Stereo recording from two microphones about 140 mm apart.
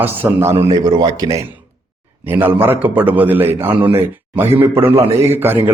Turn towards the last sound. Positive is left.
turn(degrees=-15)  # may be behind; listen again after turning